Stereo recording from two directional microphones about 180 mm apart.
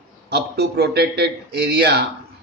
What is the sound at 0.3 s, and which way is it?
A man's voice, 65° right (ahead or behind).